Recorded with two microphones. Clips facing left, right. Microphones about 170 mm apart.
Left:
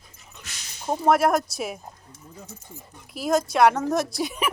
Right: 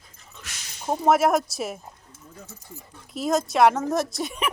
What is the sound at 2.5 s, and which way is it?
Speech, 20° left (ahead or behind).